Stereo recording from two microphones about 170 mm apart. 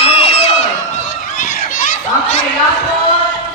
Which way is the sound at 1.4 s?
50° left (ahead or behind).